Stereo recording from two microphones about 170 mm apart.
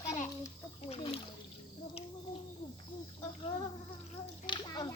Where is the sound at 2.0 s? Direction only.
35° left (ahead or behind).